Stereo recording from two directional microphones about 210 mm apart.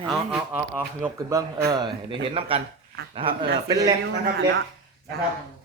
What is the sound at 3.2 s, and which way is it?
Speech, 20° right (ahead or behind).